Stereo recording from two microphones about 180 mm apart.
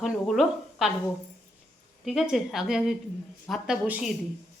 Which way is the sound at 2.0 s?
Centre (ahead or behind).